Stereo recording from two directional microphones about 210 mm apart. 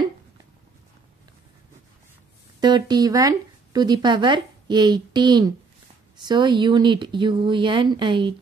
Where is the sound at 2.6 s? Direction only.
20° right (ahead or behind).